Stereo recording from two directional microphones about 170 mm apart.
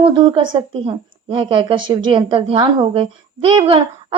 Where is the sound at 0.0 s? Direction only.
30° right (ahead or behind).